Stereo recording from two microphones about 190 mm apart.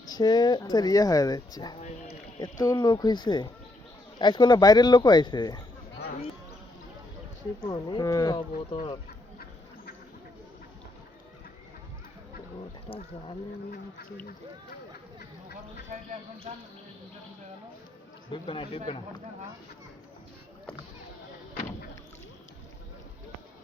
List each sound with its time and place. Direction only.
0.1 s speech: 20° left (ahead or behind)
7.6 s speech: 25° left (ahead or behind)
18.3 s speech: 30° left (ahead or behind)